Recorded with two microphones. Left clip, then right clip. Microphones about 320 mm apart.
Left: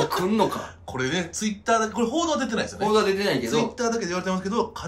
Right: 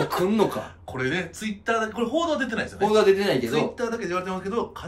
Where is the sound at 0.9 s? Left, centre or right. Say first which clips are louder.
Even; centre.